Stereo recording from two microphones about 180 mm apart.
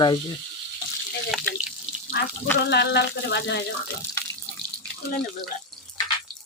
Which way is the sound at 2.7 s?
70° left (ahead or behind).